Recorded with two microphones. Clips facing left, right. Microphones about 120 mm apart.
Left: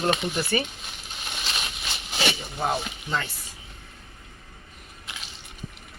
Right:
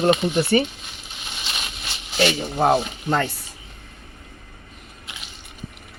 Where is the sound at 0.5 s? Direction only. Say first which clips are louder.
Right 8 dB; 35° right (ahead or behind).